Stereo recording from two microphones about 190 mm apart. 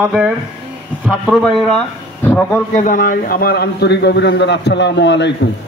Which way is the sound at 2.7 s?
45° left (ahead or behind).